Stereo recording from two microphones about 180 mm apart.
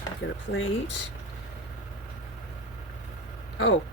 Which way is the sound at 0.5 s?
90° left.